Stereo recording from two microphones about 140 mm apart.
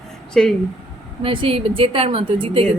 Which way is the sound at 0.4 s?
5° left (ahead or behind).